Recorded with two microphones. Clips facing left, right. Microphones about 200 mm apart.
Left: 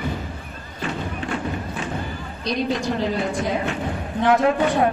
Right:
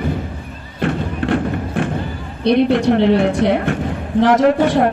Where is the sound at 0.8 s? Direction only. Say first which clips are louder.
Right 8 dB; 60° right (ahead or behind).